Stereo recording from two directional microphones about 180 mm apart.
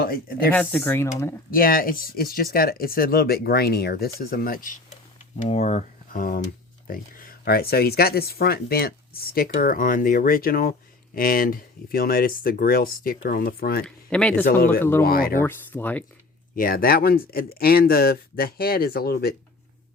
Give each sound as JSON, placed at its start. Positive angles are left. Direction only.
{"t": 0.0, "sound": "speech", "side_deg": 55}
{"t": 0.5, "sound": "speech", "side_deg": 10}
{"t": 1.5, "sound": "speech", "side_deg": 55}
{"t": 5.4, "sound": "speech", "side_deg": 40}
{"t": 13.8, "sound": "speech", "side_deg": 5}
{"t": 14.4, "sound": "speech", "side_deg": 55}
{"t": 14.8, "sound": "speech", "side_deg": 15}
{"t": 15.0, "sound": "speech", "side_deg": 55}
{"t": 15.4, "sound": "speech", "side_deg": 10}
{"t": 16.6, "sound": "speech", "side_deg": 55}